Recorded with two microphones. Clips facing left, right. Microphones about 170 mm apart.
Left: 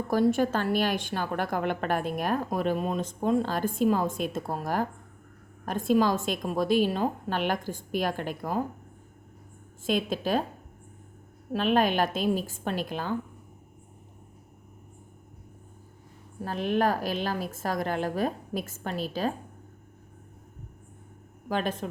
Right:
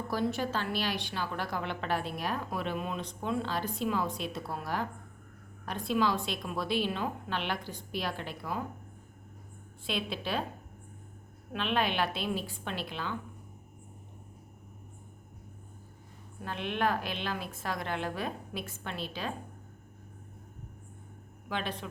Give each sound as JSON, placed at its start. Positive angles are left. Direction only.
{"t": 0.1, "sound": "a woman's voice", "side_deg": 50}
{"t": 9.8, "sound": "a woman's voice", "side_deg": 45}
{"t": 11.5, "sound": "a woman's voice", "side_deg": 40}
{"t": 16.4, "sound": "speech", "side_deg": 40}
{"t": 21.5, "sound": "a woman's voice", "side_deg": 45}